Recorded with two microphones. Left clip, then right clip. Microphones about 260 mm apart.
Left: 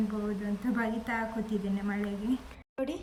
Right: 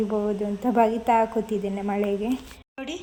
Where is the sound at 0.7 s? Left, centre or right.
Right.